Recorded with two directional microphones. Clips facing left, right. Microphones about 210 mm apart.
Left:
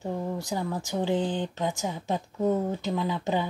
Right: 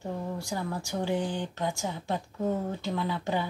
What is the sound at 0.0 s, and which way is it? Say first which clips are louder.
Speech: left 3 dB; 20° left (ahead or behind).